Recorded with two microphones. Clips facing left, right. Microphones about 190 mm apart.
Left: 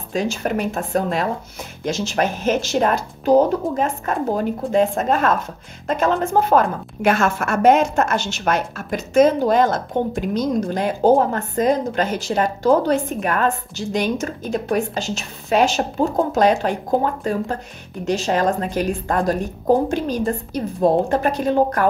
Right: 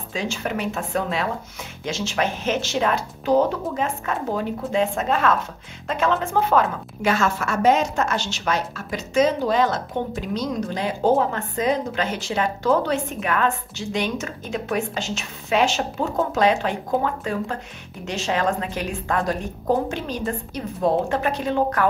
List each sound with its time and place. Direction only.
0.1 s a woman's voice: 45° left (ahead or behind)